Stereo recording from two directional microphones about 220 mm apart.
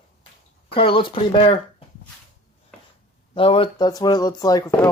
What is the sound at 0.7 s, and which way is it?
Speech, 25° left (ahead or behind).